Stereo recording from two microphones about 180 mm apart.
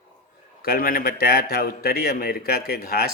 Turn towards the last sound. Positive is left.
turn(degrees=60)  # may be behind; listen again after turning